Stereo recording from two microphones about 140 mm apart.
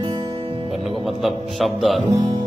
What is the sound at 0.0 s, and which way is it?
Music, 35° right (ahead or behind).